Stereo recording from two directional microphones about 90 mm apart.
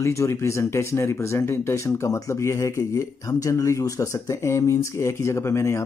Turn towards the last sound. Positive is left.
turn(degrees=30)  # may be behind; listen again after turning